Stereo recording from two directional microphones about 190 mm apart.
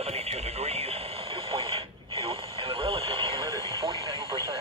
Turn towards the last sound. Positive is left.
turn(degrees=-20)  # may be behind; listen again after turning